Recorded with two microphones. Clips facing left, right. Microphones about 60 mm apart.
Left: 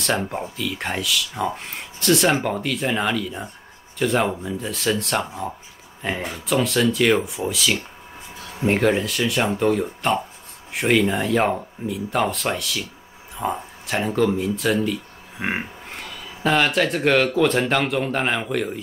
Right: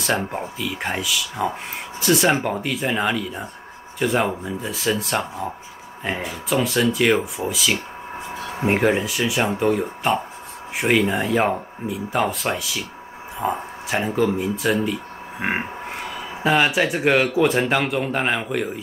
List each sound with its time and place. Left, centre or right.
0.2 s speech: centre
8.3 s a sound: right
8.6 s speech: centre
14.8 s speech: centre
15.9 s a sound: centre
16.4 s speech: centre